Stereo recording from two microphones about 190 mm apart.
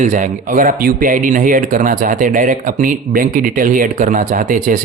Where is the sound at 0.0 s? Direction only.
40° right (ahead or behind).